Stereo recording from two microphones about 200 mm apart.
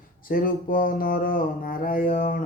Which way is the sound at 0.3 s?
45° left (ahead or behind).